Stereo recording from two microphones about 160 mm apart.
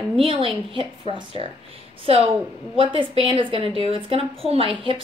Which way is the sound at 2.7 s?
35° right (ahead or behind).